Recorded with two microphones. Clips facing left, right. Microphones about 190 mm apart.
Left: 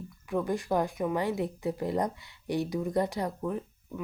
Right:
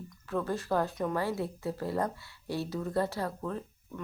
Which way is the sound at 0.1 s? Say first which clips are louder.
Left 3 dB; 15° left (ahead or behind).